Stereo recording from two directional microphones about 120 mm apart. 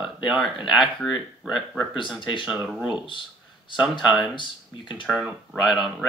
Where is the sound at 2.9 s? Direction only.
45° left (ahead or behind).